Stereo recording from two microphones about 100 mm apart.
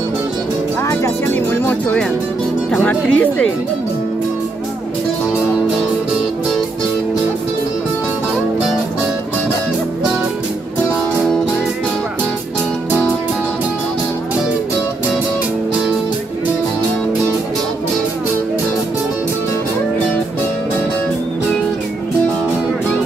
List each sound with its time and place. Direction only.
0.8 s music: 25° left (ahead or behind)
2.7 s speech: 15° left (ahead or behind)